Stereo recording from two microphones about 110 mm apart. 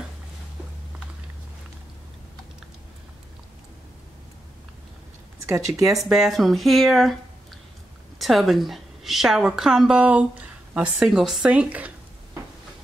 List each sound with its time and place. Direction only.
5.5 s speech: 30° right (ahead or behind)
5.9 s speech: centre (ahead or behind)
8.2 s a woman's voice: centre (ahead or behind)